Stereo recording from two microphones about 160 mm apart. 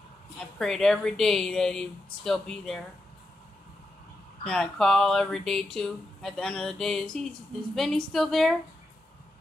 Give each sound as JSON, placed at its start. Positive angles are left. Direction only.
{"t": 0.6, "sound": "speech", "side_deg": 5}
{"t": 4.5, "sound": "speech", "side_deg": 5}